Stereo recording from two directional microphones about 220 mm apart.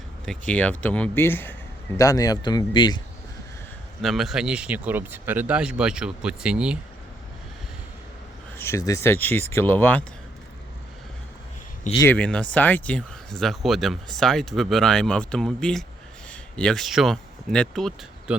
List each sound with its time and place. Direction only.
0.3 s speech: 5° left (ahead or behind)
4.0 s speech: centre (ahead or behind)
8.5 s speech: 10° left (ahead or behind)
11.9 s speech: 10° left (ahead or behind)